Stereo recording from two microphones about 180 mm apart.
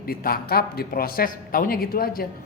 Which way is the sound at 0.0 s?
55° left (ahead or behind).